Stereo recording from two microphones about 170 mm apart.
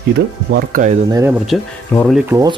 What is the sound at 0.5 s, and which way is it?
Speech, 65° right (ahead or behind).